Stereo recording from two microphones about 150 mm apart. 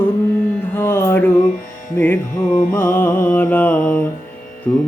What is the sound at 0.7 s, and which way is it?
Mantra, 15° left (ahead or behind).